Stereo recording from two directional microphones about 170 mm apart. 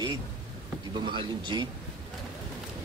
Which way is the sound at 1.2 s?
25° right (ahead or behind).